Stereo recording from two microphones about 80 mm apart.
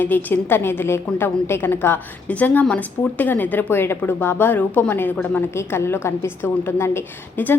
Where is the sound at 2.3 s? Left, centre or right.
Centre.